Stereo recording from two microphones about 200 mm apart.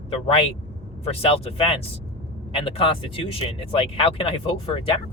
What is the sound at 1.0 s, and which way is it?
Speech, 30° left (ahead or behind).